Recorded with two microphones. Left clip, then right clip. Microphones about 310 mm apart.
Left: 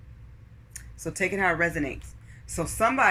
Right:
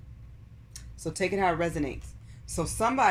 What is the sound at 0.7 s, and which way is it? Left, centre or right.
Speech, centre.